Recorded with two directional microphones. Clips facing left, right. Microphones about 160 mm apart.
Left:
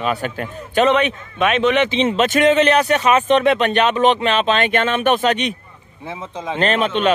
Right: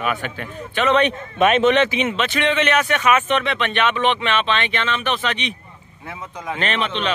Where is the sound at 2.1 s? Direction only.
40° left (ahead or behind).